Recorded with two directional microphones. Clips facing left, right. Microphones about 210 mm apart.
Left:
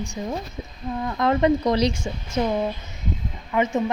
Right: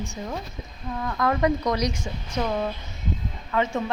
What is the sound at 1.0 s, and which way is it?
A woman's voice, 25° left (ahead or behind).